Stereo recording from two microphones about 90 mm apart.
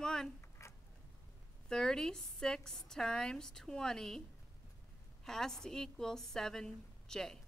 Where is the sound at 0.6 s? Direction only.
35° left (ahead or behind).